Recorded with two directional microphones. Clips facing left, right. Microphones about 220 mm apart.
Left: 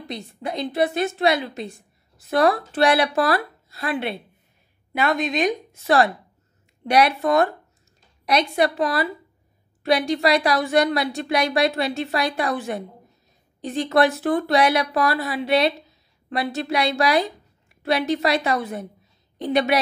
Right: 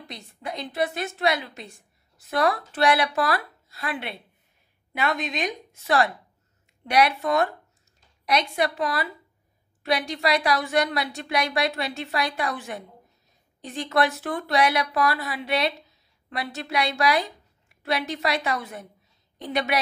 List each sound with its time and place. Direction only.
0.1 s a woman's voice: 30° left (ahead or behind)